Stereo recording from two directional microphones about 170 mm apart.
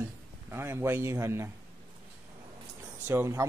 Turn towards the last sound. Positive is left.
turn(degrees=-15)  # may be behind; listen again after turning